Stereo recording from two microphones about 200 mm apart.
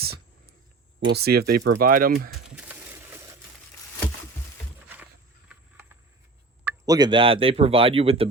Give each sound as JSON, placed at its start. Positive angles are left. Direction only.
{"t": 0.0, "sound": "a sound", "side_deg": -50}
{"t": 1.1, "sound": "speech", "side_deg": -50}
{"t": 6.7, "sound": "speech", "side_deg": -20}